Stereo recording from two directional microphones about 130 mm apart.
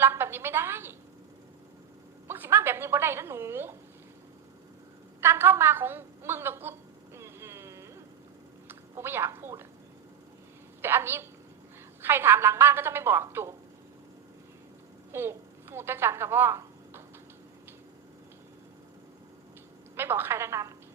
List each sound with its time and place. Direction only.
0.0 s a sound: 20° right (ahead or behind)
2.2 s a woman's voice: 15° right (ahead or behind)
5.2 s a sound: 15° right (ahead or behind)
8.6 s a woman's voice: 20° right (ahead or behind)
10.8 s a woman's voice: 15° right (ahead or behind)
15.1 s a woman's voice: 20° right (ahead or behind)
20.0 s a woman's voice: 15° right (ahead or behind)